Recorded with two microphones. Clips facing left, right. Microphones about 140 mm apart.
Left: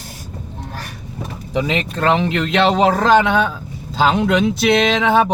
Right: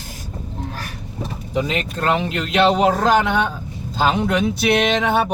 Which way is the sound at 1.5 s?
90° left.